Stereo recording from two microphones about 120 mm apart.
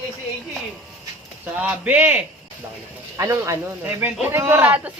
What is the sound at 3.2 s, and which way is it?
Speech, 30° right (ahead or behind).